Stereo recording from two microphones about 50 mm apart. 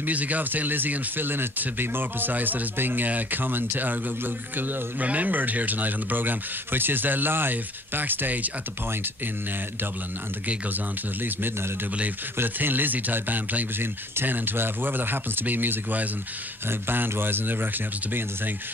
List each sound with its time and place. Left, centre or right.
0.0 s speech: right
5.0 s speech: right
12.5 s speech: right